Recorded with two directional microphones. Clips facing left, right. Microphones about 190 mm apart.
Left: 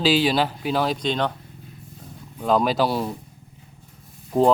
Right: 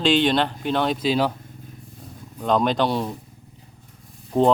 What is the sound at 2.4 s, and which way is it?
Speech, 5° left (ahead or behind).